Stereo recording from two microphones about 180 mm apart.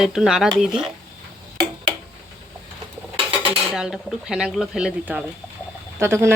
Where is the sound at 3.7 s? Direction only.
5° right (ahead or behind).